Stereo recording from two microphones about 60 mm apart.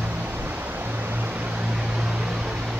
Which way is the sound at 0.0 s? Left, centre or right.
Right.